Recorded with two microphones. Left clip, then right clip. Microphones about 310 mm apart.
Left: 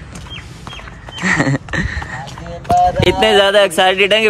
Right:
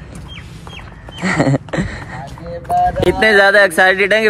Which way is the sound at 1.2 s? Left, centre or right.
Centre.